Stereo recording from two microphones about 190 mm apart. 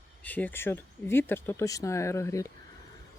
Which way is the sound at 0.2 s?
5° left (ahead or behind).